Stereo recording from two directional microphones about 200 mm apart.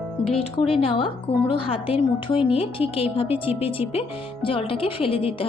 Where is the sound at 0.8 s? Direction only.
25° left (ahead or behind).